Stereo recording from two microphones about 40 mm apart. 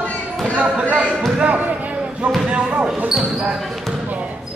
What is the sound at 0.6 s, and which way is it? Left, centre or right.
Speech, right.